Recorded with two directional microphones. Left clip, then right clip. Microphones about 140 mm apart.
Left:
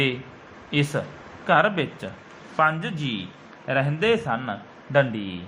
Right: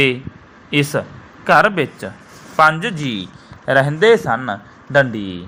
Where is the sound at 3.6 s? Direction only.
60° right (ahead or behind).